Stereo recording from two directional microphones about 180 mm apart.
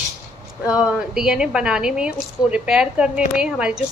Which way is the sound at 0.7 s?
5° right (ahead or behind).